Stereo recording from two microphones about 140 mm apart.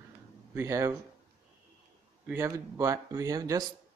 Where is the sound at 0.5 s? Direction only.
20° right (ahead or behind).